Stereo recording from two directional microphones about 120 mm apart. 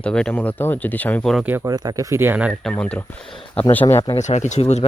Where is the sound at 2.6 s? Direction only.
10° left (ahead or behind).